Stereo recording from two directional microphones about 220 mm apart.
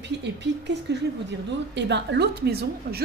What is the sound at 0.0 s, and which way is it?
A woman's voice, 50° right (ahead or behind).